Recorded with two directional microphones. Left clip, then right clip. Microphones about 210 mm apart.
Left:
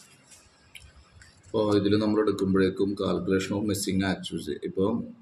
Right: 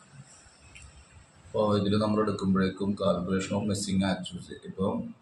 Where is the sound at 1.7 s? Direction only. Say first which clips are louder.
Left 6 dB; 50° left (ahead or behind).